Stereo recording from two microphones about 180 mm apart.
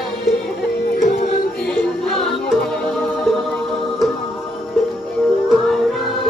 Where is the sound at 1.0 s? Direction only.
50° left (ahead or behind).